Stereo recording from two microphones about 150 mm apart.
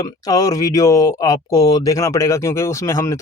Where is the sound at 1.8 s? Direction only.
20° left (ahead or behind).